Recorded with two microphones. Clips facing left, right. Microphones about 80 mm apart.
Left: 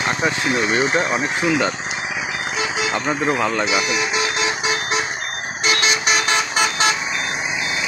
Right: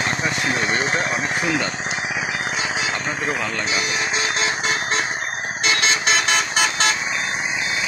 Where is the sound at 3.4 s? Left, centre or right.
Left.